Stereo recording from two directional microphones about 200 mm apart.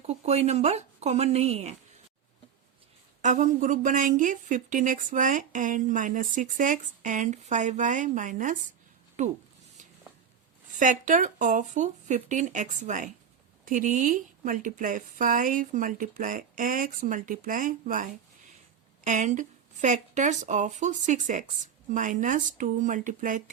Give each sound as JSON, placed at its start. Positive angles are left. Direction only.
{"t": 0.1, "sound": "a woman's voice", "side_deg": -30}
{"t": 3.2, "sound": "a woman's voice", "side_deg": -40}
{"t": 10.8, "sound": "a woman's voice", "side_deg": -40}